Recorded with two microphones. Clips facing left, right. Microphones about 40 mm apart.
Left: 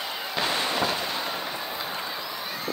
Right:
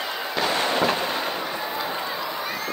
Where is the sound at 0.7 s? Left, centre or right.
Right.